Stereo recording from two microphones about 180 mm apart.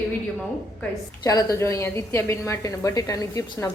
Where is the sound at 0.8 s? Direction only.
20° left (ahead or behind).